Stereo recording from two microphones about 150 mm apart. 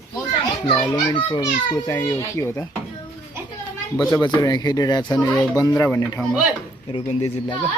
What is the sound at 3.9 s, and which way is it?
A child's voice, 30° left (ahead or behind).